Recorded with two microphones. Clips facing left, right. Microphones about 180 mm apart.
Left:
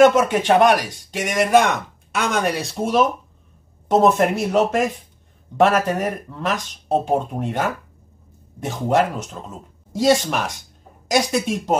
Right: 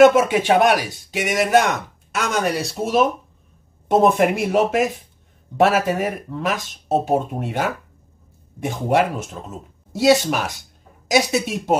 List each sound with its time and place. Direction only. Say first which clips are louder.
0.0 s speech: right 1 dB; 10° right (ahead or behind)